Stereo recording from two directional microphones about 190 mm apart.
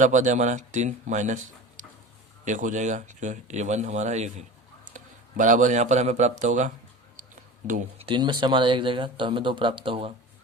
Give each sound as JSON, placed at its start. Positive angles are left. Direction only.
{"t": 0.0, "sound": "a man's voice", "side_deg": -40}
{"t": 8.0, "sound": "speech", "side_deg": -25}